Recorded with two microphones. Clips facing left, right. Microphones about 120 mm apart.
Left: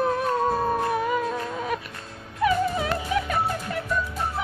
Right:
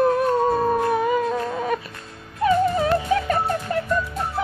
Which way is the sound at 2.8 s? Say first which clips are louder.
Right 6 dB; 5° left (ahead or behind).